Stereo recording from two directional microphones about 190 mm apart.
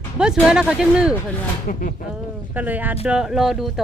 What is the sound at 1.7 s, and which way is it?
Speech, 45° left (ahead or behind).